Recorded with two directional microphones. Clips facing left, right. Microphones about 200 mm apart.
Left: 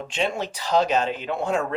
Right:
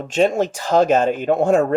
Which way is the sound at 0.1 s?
45° right (ahead or behind).